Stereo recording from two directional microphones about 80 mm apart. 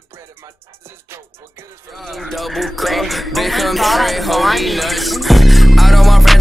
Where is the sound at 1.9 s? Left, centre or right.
Centre.